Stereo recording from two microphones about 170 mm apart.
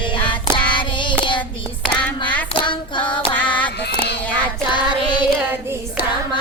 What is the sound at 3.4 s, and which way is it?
Music, 10° left (ahead or behind).